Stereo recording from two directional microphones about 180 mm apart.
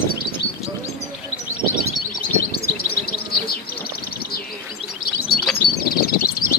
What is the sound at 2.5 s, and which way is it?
Chirp, 60° left (ahead or behind).